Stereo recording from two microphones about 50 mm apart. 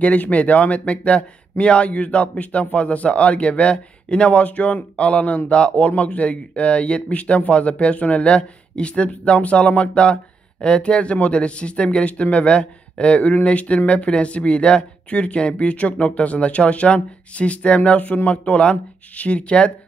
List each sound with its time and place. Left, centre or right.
0.0 s speech: left